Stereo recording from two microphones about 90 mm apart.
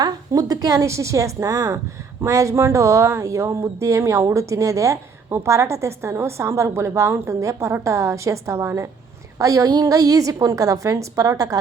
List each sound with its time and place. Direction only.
0.0 s a woman's voice: 45° right (ahead or behind)